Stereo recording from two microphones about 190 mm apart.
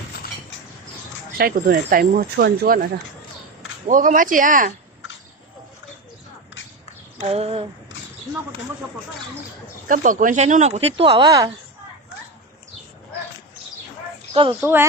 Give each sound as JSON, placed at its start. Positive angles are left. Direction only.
{"t": 1.4, "sound": "speech", "side_deg": -50}
{"t": 3.8, "sound": "speech", "side_deg": -45}
{"t": 7.2, "sound": "speech", "side_deg": -35}
{"t": 9.9, "sound": "speech", "side_deg": -45}
{"t": 14.6, "sound": "speech", "side_deg": -10}